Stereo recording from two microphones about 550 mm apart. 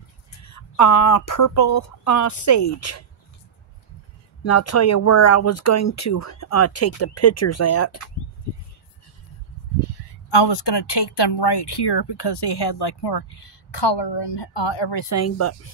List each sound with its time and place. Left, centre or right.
0.4 s speech: left
4.4 s speech: left
10.3 s speech: left
15.0 s speech: left